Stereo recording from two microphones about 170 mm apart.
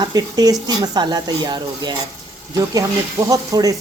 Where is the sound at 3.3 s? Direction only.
20° right (ahead or behind).